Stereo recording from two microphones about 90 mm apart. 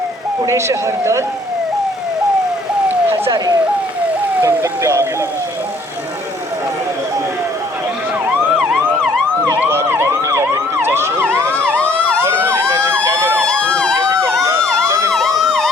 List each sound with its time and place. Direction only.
0.4 s speech: 30° right (ahead or behind)
3.3 s speech: 45° right (ahead or behind)
4.4 s speech: 35° right (ahead or behind)
9.6 s emergency vehicle: 25° right (ahead or behind)
13.4 s emergency vehicle: 10° left (ahead or behind)
13.9 s emergency vehicle: 30° right (ahead or behind)
15.4 s emergency vehicle: centre (ahead or behind)